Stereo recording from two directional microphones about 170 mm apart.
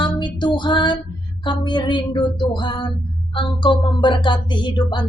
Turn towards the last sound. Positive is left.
turn(degrees=25)  # may be behind; listen again after turning